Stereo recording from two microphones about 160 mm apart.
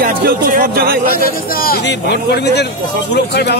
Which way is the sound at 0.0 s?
70° right (ahead or behind).